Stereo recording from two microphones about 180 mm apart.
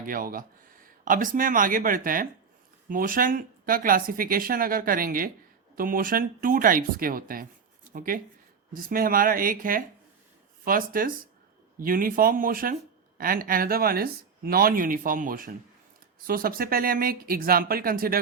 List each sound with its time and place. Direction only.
0.0 s speech: 50° right (ahead or behind)